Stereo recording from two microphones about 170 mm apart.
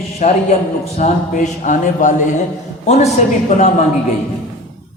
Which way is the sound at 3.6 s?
45° left (ahead or behind).